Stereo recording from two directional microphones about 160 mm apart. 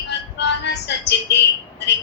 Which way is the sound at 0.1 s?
90° left.